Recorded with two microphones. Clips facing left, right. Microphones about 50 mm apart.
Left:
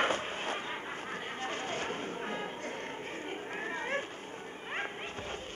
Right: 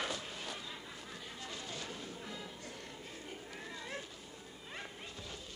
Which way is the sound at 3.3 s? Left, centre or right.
Left.